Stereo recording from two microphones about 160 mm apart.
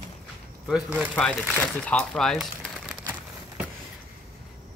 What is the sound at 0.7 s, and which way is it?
Speech, 5° right (ahead or behind).